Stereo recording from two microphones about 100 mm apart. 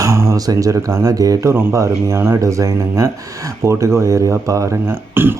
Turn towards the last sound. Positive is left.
turn(degrees=-25)  # may be behind; listen again after turning